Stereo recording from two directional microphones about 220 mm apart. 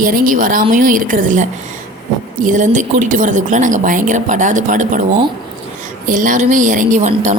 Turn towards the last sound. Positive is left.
turn(degrees=-30)  # may be behind; listen again after turning